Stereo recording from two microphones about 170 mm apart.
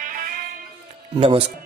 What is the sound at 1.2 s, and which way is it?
Speech, 35° right (ahead or behind).